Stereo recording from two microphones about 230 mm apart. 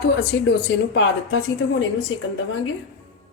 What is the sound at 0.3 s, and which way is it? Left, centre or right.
Speech, left.